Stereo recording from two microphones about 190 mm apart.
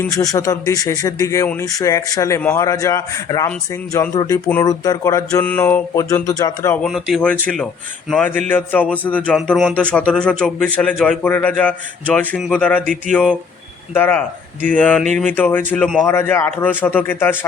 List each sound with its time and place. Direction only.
0.2 s mantra: 20° left (ahead or behind)
1.6 s speech: 20° left (ahead or behind)
2.4 s mantra: 15° left (ahead or behind)
6.8 s a man's voice: centre (ahead or behind)
8.1 s mantra: 10° left (ahead or behind)
9.0 s a man's voice: 5° left (ahead or behind)
12.8 s a sound: 45° right (ahead or behind)
13.9 s mantra: 10° left (ahead or behind)